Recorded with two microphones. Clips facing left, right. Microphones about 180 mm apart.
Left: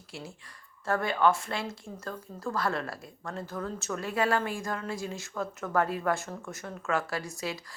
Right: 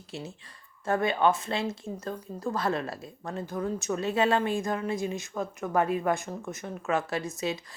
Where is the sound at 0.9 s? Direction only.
20° right (ahead or behind).